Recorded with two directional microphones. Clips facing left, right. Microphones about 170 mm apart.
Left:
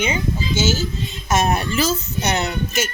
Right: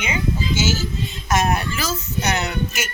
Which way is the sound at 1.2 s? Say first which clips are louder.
Left 1 dB; 25° left (ahead or behind).